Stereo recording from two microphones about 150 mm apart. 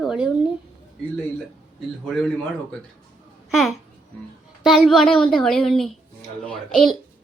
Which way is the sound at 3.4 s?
Centre (ahead or behind).